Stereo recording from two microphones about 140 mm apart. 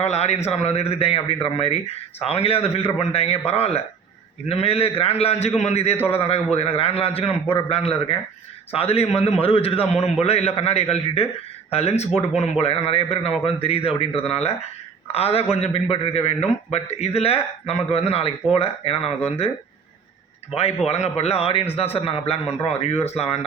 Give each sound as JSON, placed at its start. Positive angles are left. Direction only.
{"t": 0.0, "sound": "a man's voice", "side_deg": 50}
{"t": 20.6, "sound": "a man's voice", "side_deg": 45}